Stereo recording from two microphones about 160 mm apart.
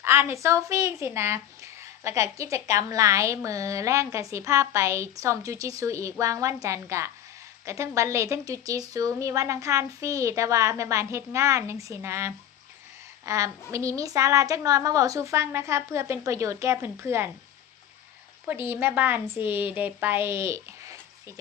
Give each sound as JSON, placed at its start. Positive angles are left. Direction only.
{"t": 0.0, "sound": "speech", "side_deg": -15}
{"t": 18.5, "sound": "a woman's voice", "side_deg": -15}